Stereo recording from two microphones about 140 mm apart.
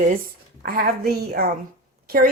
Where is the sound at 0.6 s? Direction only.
90° right.